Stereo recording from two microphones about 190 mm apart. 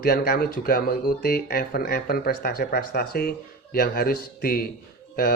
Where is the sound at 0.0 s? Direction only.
55° left (ahead or behind).